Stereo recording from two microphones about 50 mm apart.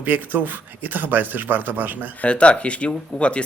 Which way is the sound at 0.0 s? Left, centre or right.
Right.